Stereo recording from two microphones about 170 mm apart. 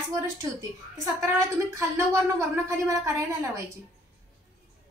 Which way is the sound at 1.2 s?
15° right (ahead or behind).